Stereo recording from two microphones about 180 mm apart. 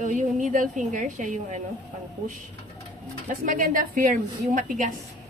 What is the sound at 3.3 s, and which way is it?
A woman's voice, 50° right (ahead or behind).